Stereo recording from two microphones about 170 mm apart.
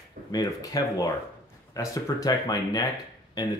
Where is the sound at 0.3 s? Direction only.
20° left (ahead or behind).